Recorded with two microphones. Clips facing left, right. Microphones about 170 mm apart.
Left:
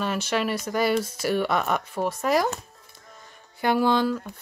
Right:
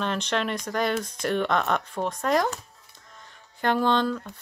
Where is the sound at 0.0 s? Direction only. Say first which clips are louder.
Left 1 dB; 5° left (ahead or behind).